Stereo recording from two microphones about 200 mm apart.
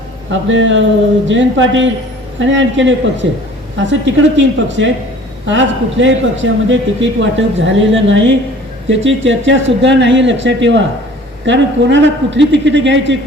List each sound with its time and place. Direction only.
0.3 s a man's voice: 70° right (ahead or behind)